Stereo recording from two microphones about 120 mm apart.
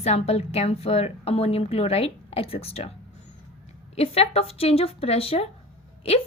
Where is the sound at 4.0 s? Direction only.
55° left (ahead or behind).